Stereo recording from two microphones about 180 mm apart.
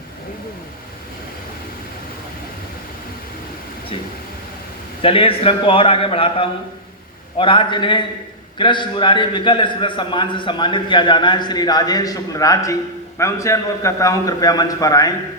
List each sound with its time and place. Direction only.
5.0 s a man's voice: 30° left (ahead or behind)